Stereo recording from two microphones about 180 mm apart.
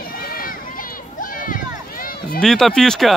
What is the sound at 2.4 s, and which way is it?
Speech, centre (ahead or behind).